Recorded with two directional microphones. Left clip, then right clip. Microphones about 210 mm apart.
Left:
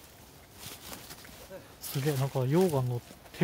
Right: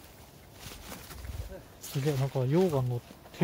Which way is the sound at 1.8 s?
20° left (ahead or behind).